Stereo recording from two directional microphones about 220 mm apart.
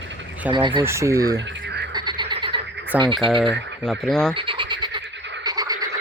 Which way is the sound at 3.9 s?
Centre (ahead or behind).